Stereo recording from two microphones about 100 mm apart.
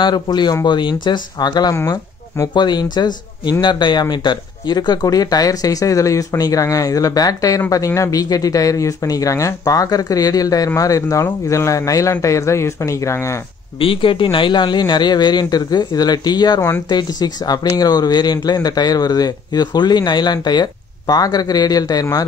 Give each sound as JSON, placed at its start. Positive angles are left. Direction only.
{"t": 0.0, "sound": "speech", "side_deg": 45}
{"t": 1.8, "sound": "speech", "side_deg": 30}
{"t": 2.5, "sound": "speech", "side_deg": 45}
{"t": 13.7, "sound": "speech", "side_deg": 60}